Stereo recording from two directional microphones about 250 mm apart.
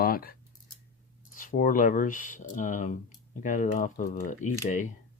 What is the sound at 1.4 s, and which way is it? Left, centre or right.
Speech, left.